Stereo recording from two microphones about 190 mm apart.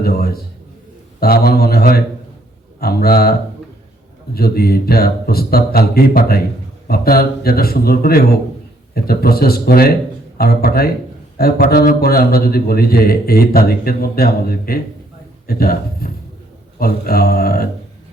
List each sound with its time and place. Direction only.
0.0 s a man's voice: 55° left (ahead or behind)
4.4 s a man's voice: 55° left (ahead or behind)